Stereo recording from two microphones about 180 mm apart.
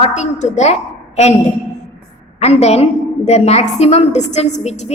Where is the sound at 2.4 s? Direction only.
35° left (ahead or behind).